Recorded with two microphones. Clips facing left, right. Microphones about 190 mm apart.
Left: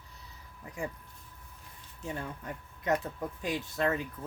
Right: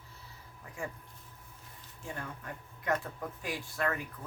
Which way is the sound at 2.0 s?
20° left (ahead or behind).